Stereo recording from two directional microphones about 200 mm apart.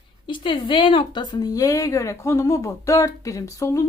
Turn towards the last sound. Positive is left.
turn(degrees=15)  # may be behind; listen again after turning